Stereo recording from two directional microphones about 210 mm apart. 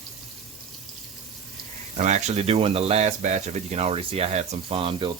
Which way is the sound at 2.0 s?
35° right (ahead or behind).